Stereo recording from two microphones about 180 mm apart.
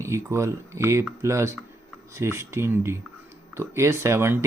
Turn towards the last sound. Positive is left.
turn(degrees=-15)  # may be behind; listen again after turning